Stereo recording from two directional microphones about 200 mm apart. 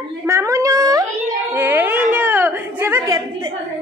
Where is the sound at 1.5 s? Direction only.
10° right (ahead or behind).